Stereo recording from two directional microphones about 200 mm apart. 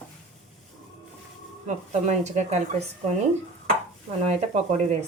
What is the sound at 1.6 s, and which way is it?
Speech, 35° right (ahead or behind).